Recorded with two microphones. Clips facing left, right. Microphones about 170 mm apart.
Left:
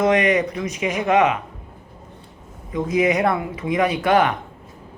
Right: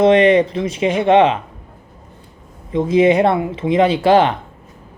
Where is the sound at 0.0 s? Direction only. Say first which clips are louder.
Right 7 dB; 30° right (ahead or behind).